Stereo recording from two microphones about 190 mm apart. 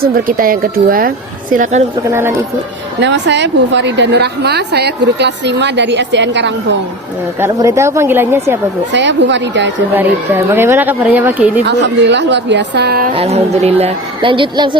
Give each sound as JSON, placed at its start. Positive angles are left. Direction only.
{"t": 0.0, "sound": "a woman's voice", "side_deg": -50}
{"t": 2.0, "sound": "a woman's voice", "side_deg": -10}
{"t": 3.0, "sound": "a woman's voice", "side_deg": -70}
{"t": 7.3, "sound": "a woman's voice", "side_deg": -15}
{"t": 8.9, "sound": "a woman's voice", "side_deg": -70}
{"t": 9.9, "sound": "a woman's voice", "side_deg": -10}
{"t": 11.6, "sound": "a woman's voice", "side_deg": -65}
{"t": 13.1, "sound": "a woman's voice", "side_deg": -35}